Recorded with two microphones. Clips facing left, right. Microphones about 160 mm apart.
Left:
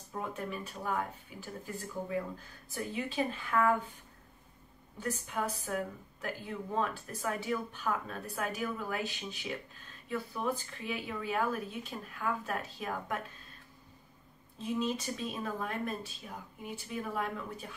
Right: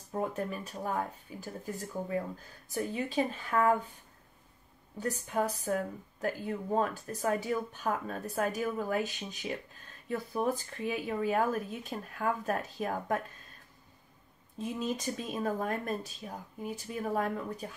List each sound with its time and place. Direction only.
0.1 s speech: 40° right (ahead or behind)
4.9 s speech: 40° right (ahead or behind)
14.6 s speech: 45° right (ahead or behind)